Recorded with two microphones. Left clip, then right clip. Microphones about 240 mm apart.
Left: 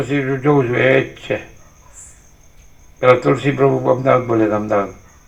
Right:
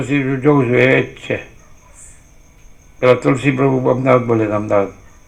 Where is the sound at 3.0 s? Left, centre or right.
Right.